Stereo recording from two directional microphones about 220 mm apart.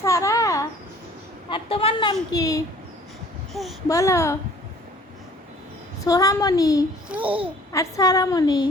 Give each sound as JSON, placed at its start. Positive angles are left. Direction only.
{"t": 0.0, "sound": "a sound", "side_deg": 15}
{"t": 1.5, "sound": "a woman's voice", "side_deg": 25}
{"t": 3.5, "sound": "speech", "side_deg": 0}
{"t": 3.8, "sound": "a woman's voice", "side_deg": 15}
{"t": 6.1, "sound": "a woman's voice", "side_deg": 15}
{"t": 7.1, "sound": "a child's voice", "side_deg": -5}
{"t": 7.7, "sound": "a woman's voice", "side_deg": 15}